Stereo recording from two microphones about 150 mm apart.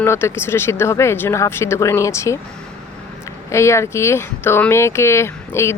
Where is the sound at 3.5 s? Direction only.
20° left (ahead or behind).